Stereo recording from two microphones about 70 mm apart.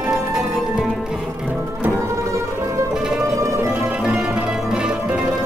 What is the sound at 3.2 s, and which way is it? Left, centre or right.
Music, right.